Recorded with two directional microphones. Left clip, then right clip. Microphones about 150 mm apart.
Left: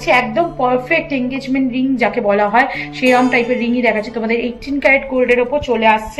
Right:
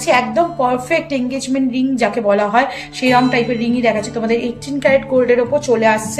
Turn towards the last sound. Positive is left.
turn(degrees=-70)  # may be behind; listen again after turning